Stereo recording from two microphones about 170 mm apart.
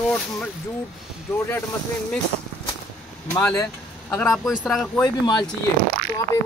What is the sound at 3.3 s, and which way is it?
Speech, 15° left (ahead or behind).